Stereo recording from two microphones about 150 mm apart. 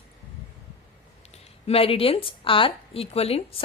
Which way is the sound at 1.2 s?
45° left (ahead or behind).